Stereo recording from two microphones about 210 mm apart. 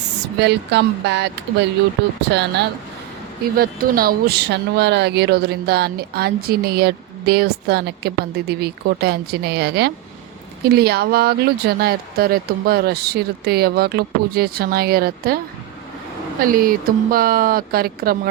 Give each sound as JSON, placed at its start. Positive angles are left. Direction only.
{"t": 0.3, "sound": "speech", "side_deg": -55}
{"t": 16.4, "sound": "speech", "side_deg": -40}